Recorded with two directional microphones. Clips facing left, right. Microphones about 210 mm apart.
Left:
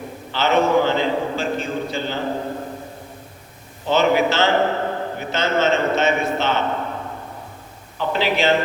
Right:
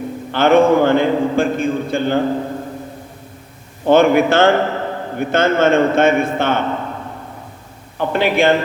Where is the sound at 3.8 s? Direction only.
55° right (ahead or behind).